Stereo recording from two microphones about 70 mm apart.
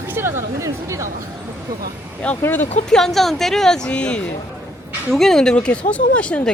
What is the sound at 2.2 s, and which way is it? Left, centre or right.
Speech, centre.